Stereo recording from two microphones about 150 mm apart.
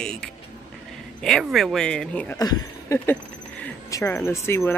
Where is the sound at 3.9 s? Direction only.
15° left (ahead or behind).